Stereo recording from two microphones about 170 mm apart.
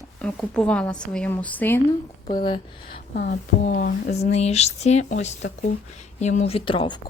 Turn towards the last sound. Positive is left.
turn(degrees=30)  # may be behind; listen again after turning